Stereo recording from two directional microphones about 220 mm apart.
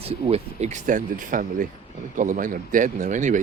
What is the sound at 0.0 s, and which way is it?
Speech, 25° right (ahead or behind).